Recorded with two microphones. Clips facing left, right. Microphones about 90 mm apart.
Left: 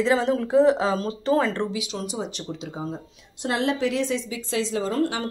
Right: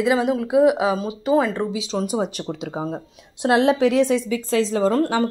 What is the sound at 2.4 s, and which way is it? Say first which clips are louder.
Speech: right 5 dB; 65° right (ahead or behind).